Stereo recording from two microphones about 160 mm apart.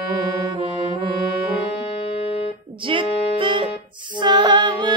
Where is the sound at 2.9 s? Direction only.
35° right (ahead or behind).